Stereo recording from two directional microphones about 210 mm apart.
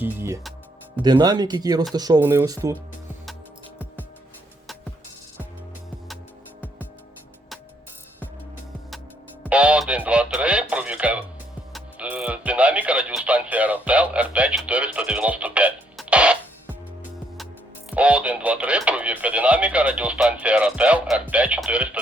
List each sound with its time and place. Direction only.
0.0 s speech: 10° right (ahead or behind)
9.4 s music: 5° right (ahead or behind)
17.9 s radio: 5° right (ahead or behind)